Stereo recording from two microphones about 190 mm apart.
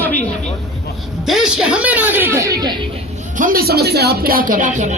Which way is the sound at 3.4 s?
50° right (ahead or behind).